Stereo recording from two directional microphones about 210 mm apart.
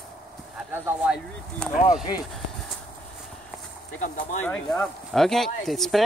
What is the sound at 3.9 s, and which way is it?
Speech, 35° left (ahead or behind).